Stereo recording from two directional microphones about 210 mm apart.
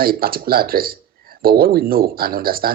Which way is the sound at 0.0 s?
45° right (ahead or behind).